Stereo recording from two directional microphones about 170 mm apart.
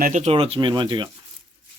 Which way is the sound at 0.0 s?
45° right (ahead or behind).